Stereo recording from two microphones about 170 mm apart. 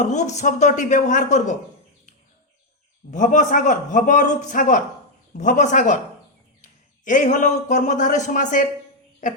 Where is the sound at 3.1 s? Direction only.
50° left (ahead or behind).